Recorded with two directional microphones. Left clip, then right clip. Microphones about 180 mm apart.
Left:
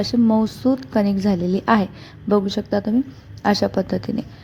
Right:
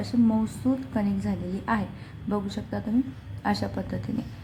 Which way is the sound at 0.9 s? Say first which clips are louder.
Left 10 dB; 35° left (ahead or behind).